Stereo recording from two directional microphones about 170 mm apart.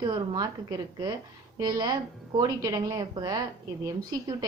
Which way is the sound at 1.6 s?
25° right (ahead or behind).